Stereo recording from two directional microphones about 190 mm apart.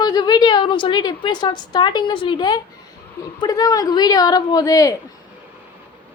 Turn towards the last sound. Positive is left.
turn(degrees=20)  # may be behind; listen again after turning